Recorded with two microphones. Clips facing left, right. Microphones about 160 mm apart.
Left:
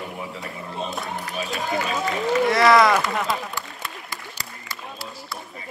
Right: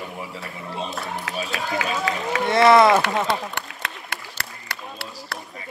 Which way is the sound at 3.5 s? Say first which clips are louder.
Right 1 dB; 70° right (ahead or behind).